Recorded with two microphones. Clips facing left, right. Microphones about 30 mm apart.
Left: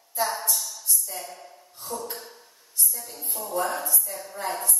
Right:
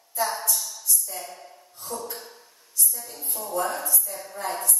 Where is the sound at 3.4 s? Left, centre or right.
Centre.